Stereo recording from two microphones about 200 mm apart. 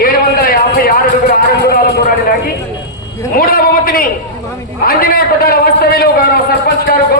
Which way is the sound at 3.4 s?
45° left (ahead or behind).